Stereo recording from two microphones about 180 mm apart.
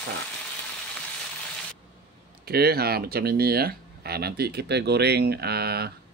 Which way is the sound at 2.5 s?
60° right (ahead or behind).